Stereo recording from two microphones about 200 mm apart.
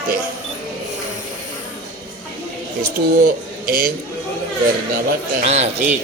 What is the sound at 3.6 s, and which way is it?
Speech, 45° right (ahead or behind).